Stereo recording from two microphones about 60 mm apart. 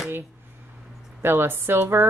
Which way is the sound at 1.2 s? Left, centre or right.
Right.